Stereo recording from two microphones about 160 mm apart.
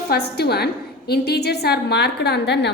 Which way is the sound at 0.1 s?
90° left.